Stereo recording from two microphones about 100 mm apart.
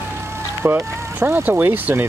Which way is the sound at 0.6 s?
20° right (ahead or behind).